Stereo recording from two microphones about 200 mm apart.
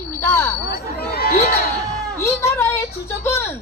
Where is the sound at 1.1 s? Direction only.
50° left (ahead or behind).